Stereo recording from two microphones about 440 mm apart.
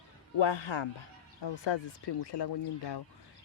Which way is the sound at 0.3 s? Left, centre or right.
Left.